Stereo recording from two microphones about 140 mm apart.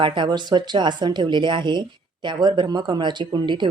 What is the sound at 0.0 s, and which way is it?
Speech, 35° right (ahead or behind).